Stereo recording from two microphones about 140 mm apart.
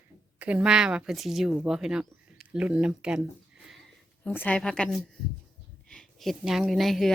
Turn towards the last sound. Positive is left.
turn(degrees=0)  # may be behind; listen again after turning